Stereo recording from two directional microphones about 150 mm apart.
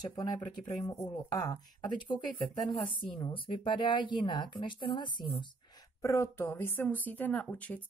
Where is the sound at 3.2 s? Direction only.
35° left (ahead or behind).